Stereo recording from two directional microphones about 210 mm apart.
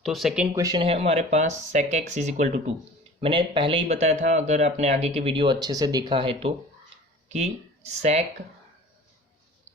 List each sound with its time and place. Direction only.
0.0 s speech: centre (ahead or behind)
0.5 s speech: 15° right (ahead or behind)
6.9 s a sound: 30° right (ahead or behind)